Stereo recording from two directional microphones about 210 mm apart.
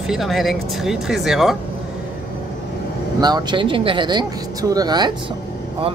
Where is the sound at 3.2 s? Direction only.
20° right (ahead or behind).